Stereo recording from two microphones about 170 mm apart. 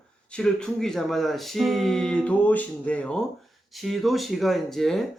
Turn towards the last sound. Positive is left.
turn(degrees=0)  # may be behind; listen again after turning